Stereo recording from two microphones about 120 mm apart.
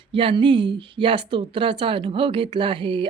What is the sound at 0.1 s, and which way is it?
A woman's voice, 45° right (ahead or behind).